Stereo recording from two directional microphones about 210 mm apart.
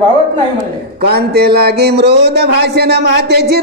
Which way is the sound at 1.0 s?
50° right (ahead or behind).